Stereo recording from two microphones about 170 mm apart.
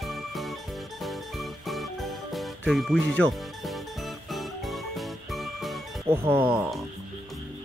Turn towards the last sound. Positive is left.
turn(degrees=-5)  # may be behind; listen again after turning